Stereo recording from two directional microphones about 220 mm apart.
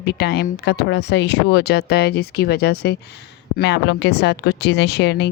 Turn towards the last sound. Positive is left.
turn(degrees=50)  # may be behind; listen again after turning